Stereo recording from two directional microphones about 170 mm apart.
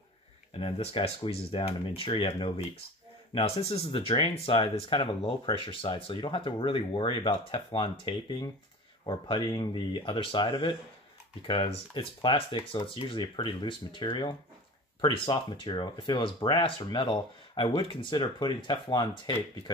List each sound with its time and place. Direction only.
0.5 s speech: 30° left (ahead or behind)